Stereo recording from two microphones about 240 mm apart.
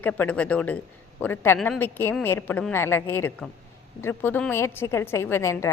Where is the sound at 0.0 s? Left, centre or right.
Centre.